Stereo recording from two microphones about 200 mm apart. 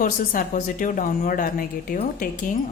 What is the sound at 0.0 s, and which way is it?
A woman's voice, 45° left (ahead or behind).